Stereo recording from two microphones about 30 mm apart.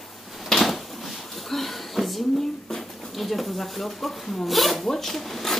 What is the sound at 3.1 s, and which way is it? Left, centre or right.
A woman's voice, centre.